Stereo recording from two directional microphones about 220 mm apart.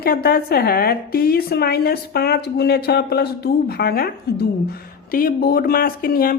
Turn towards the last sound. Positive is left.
turn(degrees=40)  # may be behind; listen again after turning